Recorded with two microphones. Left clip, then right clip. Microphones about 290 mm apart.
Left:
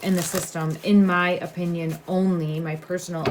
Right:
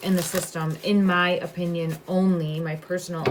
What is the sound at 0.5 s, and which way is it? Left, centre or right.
Speech, centre.